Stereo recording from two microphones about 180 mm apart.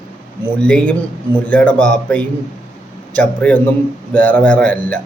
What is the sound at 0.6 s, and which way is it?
A man's voice, 5° left (ahead or behind).